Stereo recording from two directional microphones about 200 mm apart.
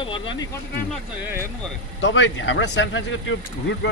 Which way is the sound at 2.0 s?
65° left (ahead or behind).